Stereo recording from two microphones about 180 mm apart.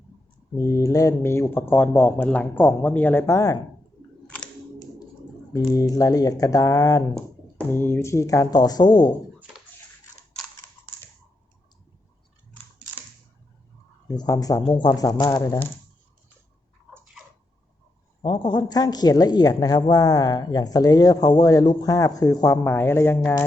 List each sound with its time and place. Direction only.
0.5 s speech: 20° left (ahead or behind)
5.5 s a woman's voice: 20° left (ahead or behind)
14.1 s a woman's voice: 20° left (ahead or behind)
18.2 s a woman's voice: 25° left (ahead or behind)